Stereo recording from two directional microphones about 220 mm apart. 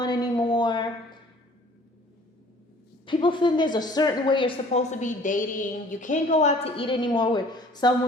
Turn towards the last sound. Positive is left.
turn(degrees=20)  # may be behind; listen again after turning